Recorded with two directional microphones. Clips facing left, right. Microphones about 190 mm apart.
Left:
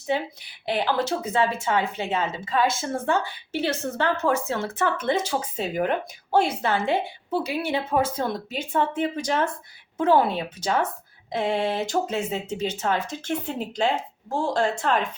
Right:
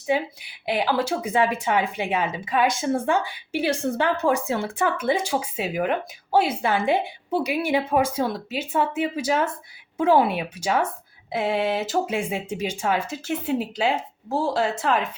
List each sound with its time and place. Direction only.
0.1 s a woman's voice: 10° right (ahead or behind)